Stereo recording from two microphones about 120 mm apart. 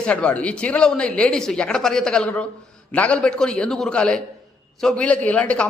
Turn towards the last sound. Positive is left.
turn(degrees=10)  # may be behind; listen again after turning